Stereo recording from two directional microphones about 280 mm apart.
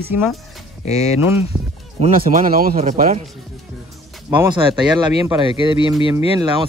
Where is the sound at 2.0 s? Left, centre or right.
Right.